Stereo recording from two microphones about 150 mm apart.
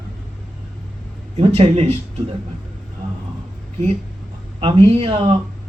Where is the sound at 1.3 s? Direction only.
40° right (ahead or behind).